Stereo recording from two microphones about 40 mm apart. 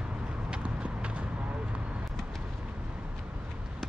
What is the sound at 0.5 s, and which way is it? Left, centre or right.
Clip-clop, right.